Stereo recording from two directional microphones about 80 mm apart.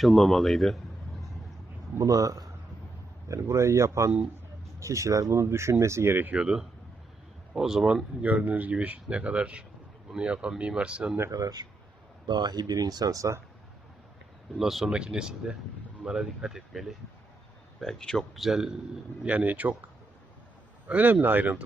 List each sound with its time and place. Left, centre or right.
0.0 s speech: centre
2.0 s a man's voice: right
6.3 s speech: centre
8.2 s speech: centre
11.3 s a man's voice: right
14.6 s speech: centre
19.2 s speech: centre